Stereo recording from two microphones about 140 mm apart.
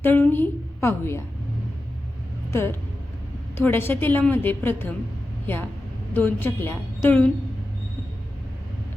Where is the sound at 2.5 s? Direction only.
20° left (ahead or behind).